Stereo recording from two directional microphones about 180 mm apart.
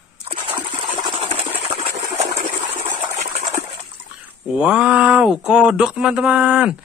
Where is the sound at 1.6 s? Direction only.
40° right (ahead or behind).